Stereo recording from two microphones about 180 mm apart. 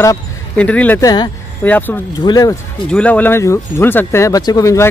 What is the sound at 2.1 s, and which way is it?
Speech, 20° left (ahead or behind).